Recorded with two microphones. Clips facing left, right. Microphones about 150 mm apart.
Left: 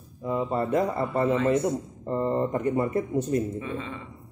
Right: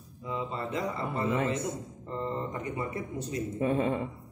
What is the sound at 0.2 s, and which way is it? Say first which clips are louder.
A man's voice: left 8 dB; 50° left (ahead or behind).